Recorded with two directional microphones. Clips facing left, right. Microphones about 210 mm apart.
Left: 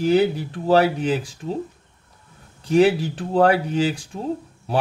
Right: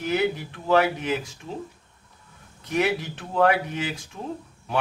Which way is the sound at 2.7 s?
30° left (ahead or behind).